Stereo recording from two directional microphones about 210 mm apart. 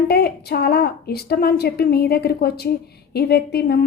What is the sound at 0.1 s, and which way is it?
A woman's voice, 50° left (ahead or behind).